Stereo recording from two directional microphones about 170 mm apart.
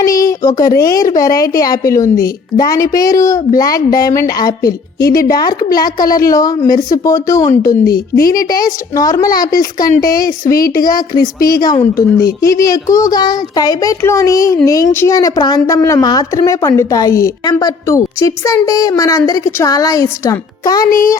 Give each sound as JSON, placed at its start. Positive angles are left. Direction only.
{"t": 0.0, "sound": "speech", "side_deg": 20}
{"t": 4.9, "sound": "speech", "side_deg": 60}
{"t": 5.4, "sound": "speech", "side_deg": 25}
{"t": 6.7, "sound": "speech", "side_deg": 55}
{"t": 7.0, "sound": "speech", "side_deg": 20}
{"t": 7.9, "sound": "speech", "side_deg": 65}
{"t": 9.0, "sound": "speech", "side_deg": 20}
{"t": 9.8, "sound": "speech", "side_deg": 55}
{"t": 11.4, "sound": "speech", "side_deg": 20}
{"t": 20.8, "sound": "speech", "side_deg": 55}